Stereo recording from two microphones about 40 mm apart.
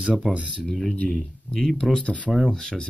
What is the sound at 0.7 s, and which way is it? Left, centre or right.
Speech, centre.